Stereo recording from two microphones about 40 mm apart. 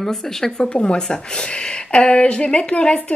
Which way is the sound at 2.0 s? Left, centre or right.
Left.